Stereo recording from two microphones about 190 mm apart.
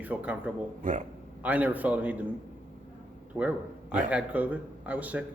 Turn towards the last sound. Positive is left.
turn(degrees=-10)  # may be behind; listen again after turning